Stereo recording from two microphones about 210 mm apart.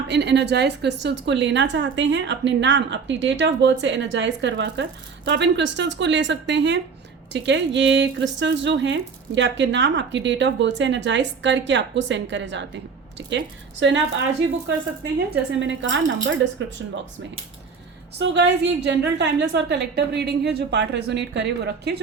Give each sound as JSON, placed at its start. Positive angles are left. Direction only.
{"t": 0.1, "sound": "a woman's voice", "side_deg": -55}
{"t": 15.5, "sound": "a woman's voice", "side_deg": -60}
{"t": 18.2, "sound": "a woman's voice", "side_deg": -55}